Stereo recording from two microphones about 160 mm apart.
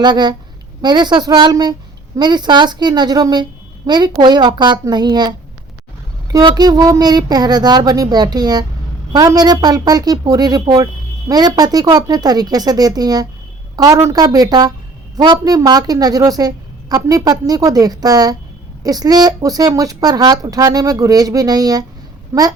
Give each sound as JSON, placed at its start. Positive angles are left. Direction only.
{"t": 0.0, "sound": "a woman's voice", "side_deg": -25}